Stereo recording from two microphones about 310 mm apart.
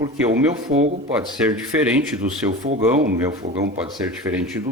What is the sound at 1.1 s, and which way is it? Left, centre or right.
Speech, centre.